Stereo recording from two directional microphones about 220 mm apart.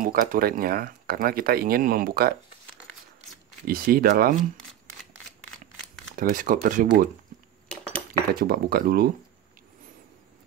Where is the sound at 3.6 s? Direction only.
40° right (ahead or behind).